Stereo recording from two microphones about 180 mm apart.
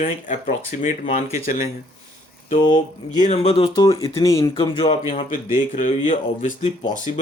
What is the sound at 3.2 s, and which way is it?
Speech, 35° left (ahead or behind).